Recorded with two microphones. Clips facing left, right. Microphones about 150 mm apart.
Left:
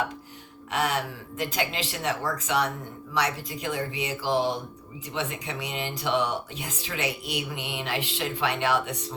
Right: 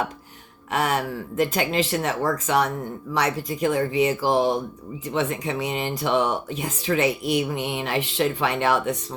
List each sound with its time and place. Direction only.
0.7 s speech: 50° right (ahead or behind)